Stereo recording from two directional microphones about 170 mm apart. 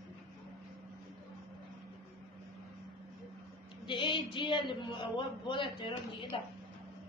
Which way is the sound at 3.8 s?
30° left (ahead or behind).